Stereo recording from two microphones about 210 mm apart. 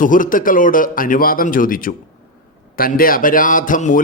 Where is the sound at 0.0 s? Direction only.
40° left (ahead or behind).